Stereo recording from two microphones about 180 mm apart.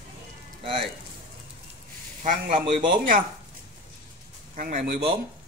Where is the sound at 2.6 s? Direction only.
25° right (ahead or behind).